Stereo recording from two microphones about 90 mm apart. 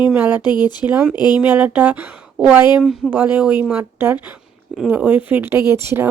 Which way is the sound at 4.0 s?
25° right (ahead or behind).